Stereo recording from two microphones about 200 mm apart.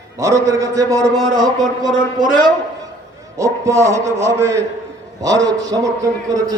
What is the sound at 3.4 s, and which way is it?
A man's voice, 15° right (ahead or behind).